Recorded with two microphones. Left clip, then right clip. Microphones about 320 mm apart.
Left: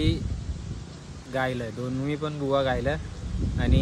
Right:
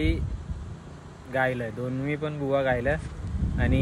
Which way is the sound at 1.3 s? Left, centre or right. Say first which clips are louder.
Right 2 dB; centre.